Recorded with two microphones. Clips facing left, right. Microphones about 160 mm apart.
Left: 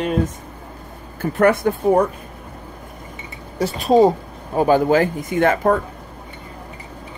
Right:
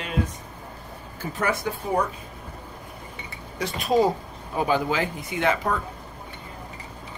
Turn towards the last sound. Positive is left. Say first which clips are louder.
# left 8 dB
turn(degrees=50)  # may be behind; listen again after turning